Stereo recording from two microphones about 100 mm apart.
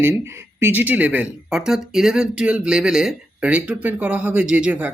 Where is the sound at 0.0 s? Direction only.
25° right (ahead or behind).